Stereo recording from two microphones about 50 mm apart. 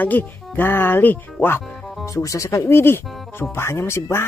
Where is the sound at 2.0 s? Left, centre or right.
Left.